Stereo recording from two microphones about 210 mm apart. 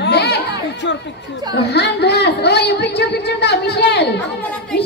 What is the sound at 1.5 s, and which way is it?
A woman's voice, 50° left (ahead or behind).